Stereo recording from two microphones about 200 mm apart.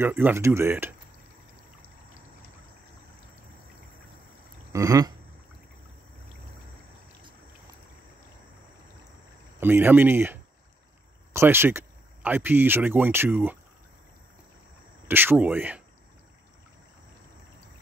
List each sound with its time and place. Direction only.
0.0 s speech: 10° right (ahead or behind)
4.7 s speech: 15° right (ahead or behind)
9.6 s speech: 10° right (ahead or behind)
15.0 s speech: 10° right (ahead or behind)